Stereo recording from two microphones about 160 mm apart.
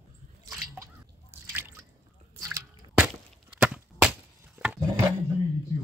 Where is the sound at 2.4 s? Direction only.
20° right (ahead or behind).